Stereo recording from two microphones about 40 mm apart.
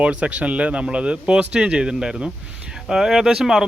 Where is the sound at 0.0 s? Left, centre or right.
Right.